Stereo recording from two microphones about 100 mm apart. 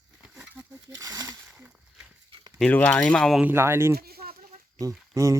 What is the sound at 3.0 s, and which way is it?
Speech, 5° left (ahead or behind).